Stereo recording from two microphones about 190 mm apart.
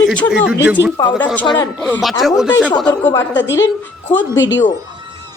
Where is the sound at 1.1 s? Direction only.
10° left (ahead or behind).